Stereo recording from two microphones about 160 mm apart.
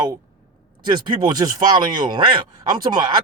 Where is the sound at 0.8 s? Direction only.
30° right (ahead or behind).